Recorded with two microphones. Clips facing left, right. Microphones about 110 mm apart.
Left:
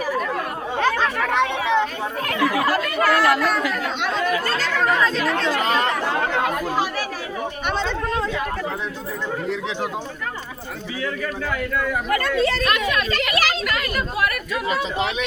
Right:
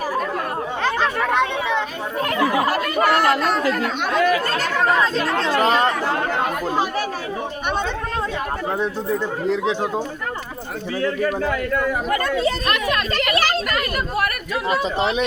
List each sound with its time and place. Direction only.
2.4 s speech: 25° right (ahead or behind)
4.0 s speech: 60° right (ahead or behind)
4.9 s speech: 35° right (ahead or behind)
11.0 s a man's voice: 45° right (ahead or behind)
11.4 s speech: 25° right (ahead or behind)
13.2 s a child's voice: 50° right (ahead or behind)
14.7 s speech: 35° right (ahead or behind)